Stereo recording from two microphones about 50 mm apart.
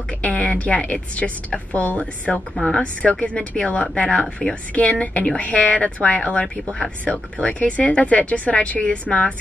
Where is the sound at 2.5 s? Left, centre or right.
Centre.